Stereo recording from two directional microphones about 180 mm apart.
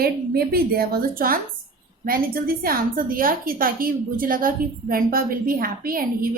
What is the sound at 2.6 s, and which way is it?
A woman's voice, 55° right (ahead or behind).